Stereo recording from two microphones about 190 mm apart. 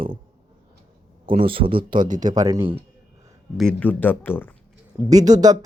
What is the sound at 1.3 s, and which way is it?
Speech, 30° right (ahead or behind).